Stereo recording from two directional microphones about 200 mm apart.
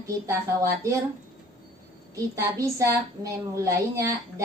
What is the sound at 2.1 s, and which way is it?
A woman's voice, 15° right (ahead or behind).